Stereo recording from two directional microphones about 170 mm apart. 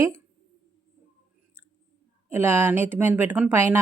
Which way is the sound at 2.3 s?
15° right (ahead or behind).